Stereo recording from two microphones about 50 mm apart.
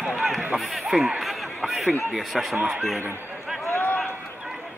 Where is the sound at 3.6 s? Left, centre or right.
Left.